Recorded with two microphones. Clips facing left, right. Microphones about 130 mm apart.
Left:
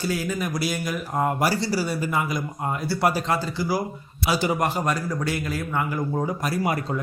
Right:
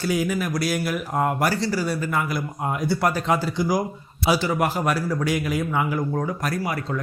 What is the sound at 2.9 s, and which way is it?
Speech, 5° left (ahead or behind).